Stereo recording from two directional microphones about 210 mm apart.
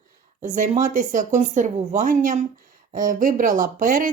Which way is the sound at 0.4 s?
35° right (ahead or behind).